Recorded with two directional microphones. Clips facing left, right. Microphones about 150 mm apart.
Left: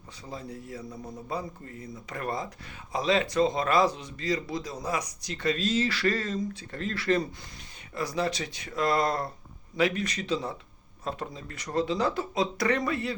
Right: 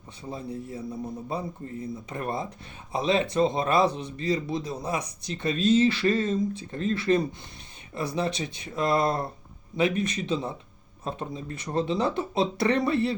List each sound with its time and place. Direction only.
0.3 s speech: 25° right (ahead or behind)